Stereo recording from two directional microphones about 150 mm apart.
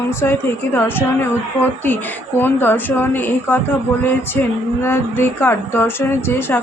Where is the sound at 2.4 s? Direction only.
15° left (ahead or behind).